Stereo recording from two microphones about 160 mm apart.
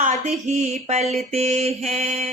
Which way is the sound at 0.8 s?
40° right (ahead or behind).